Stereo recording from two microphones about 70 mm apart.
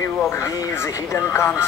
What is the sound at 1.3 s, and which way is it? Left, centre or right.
Speech, left.